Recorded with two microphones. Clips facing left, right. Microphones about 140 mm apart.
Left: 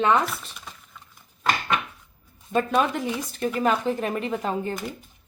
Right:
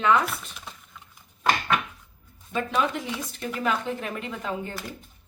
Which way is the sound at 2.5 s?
50° left (ahead or behind).